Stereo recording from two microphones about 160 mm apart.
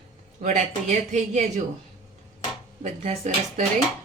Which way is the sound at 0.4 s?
45° right (ahead or behind).